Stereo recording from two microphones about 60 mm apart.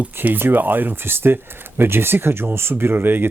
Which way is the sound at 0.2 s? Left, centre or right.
Right.